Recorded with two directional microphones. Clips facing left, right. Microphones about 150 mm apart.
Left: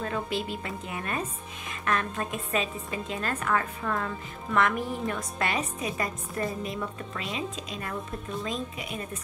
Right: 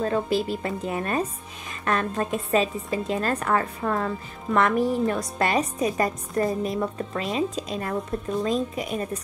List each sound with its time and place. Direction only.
0.0 s a woman's voice: 35° right (ahead or behind)